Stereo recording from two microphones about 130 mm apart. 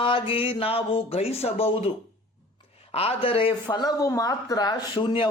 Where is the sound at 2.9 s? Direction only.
50° left (ahead or behind).